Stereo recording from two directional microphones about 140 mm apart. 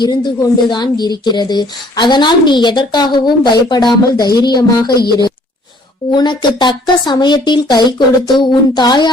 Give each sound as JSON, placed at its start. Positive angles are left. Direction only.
{"t": 0.0, "sound": "a woman's voice", "side_deg": 30}
{"t": 6.1, "sound": "a woman's voice", "side_deg": 30}